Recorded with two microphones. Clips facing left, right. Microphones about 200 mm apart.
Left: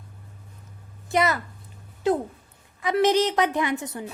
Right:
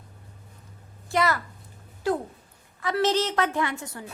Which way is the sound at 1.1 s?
20° left (ahead or behind).